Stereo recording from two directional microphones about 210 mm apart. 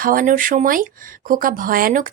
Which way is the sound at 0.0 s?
40° right (ahead or behind).